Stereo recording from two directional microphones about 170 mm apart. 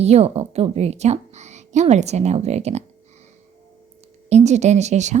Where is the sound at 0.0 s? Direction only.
40° right (ahead or behind).